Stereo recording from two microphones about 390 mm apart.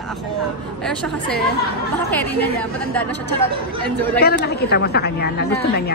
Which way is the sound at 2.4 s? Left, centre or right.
Centre.